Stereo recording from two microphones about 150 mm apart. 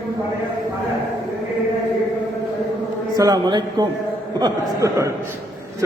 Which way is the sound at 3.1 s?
25° right (ahead or behind).